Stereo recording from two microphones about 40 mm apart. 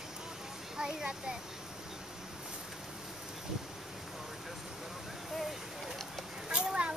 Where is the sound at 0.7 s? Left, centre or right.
Centre.